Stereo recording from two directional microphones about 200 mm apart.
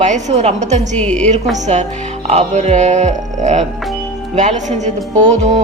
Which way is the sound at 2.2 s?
35° right (ahead or behind).